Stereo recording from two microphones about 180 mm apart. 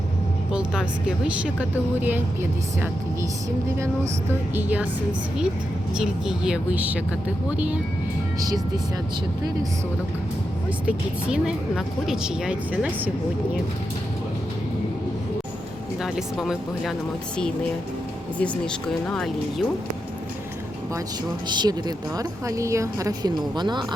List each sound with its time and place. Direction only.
0.5 s speech: 5° right (ahead or behind)
4.5 s a woman's voice: 10° right (ahead or behind)
5.9 s a woman's voice: 5° right (ahead or behind)
8.4 s a woman's voice: 20° right (ahead or behind)
10.8 s speech: 5° right (ahead or behind)
16.0 s speech: centre (ahead or behind)
18.3 s speech: 5° left (ahead or behind)
21.5 s a woman's voice: 25° right (ahead or behind)